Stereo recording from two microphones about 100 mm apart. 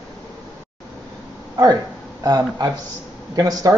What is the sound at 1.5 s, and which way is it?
Speech, 40° right (ahead or behind).